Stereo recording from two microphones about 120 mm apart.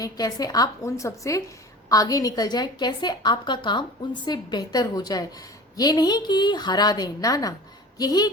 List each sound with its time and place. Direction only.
0.0 s a woman's voice: 30° left (ahead or behind)